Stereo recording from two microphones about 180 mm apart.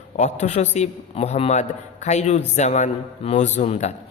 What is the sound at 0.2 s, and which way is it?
A man's voice, 40° left (ahead or behind).